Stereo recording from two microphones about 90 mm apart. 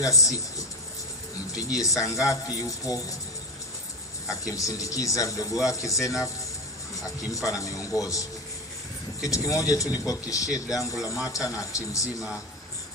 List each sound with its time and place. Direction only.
0.0 s a man's voice: 40° left (ahead or behind)
4.3 s a man's voice: 40° left (ahead or behind)
7.4 s a man's voice: 40° left (ahead or behind)